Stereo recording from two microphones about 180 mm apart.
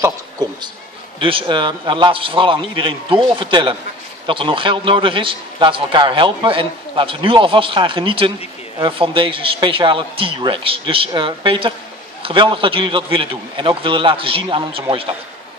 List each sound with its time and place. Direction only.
0.0 s a man's voice: 20° right (ahead or behind)